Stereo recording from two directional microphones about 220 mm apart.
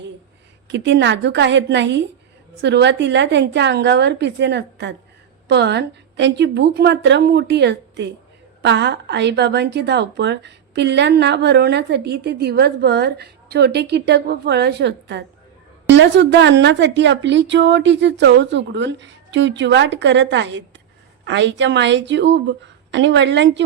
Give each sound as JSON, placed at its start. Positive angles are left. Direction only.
{"t": 0.7, "sound": "a woman's voice", "side_deg": -50}